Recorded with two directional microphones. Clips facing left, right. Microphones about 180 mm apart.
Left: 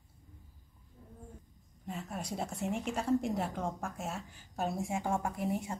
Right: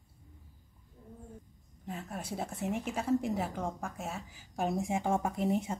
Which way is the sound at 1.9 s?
Centre (ahead or behind).